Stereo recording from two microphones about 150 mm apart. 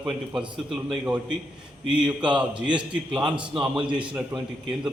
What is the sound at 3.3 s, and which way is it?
Speech, 5° right (ahead or behind).